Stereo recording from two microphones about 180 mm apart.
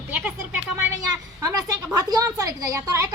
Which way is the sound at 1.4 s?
20° right (ahead or behind).